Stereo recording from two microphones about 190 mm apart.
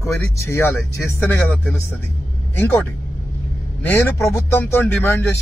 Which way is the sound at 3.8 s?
10° left (ahead or behind).